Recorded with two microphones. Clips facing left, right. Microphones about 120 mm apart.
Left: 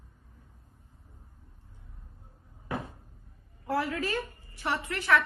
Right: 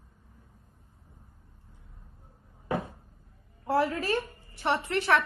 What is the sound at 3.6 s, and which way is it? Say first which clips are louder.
A woman's voice: right 4 dB; 30° right (ahead or behind).